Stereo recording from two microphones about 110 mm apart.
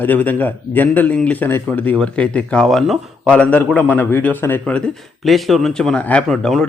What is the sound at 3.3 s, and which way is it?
Speech, 10° left (ahead or behind).